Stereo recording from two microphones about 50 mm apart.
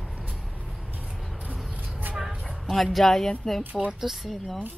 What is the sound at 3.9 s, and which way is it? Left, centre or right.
Speech, centre.